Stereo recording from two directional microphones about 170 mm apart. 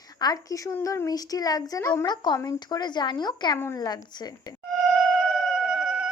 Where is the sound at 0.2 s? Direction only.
20° left (ahead or behind).